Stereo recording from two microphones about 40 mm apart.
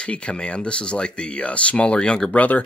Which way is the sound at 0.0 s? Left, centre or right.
Left.